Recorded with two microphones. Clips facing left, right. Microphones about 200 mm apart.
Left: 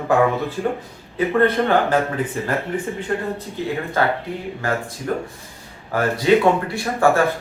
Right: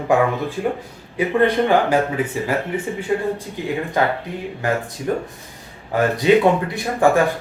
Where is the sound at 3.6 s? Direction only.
15° right (ahead or behind).